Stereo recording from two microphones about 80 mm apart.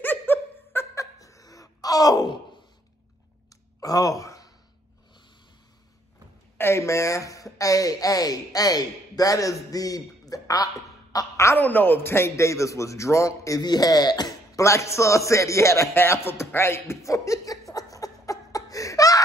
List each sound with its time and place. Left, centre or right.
0.0 s laughter: left
0.9 s wail: left
3.8 s speech: left
6.6 s speech: left
11.1 s a woman's voice: left
11.5 s a man's voice: left
13.7 s speech: left
14.6 s a sound: left